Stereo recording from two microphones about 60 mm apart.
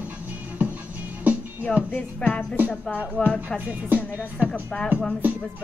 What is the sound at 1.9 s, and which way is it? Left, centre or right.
Music, left.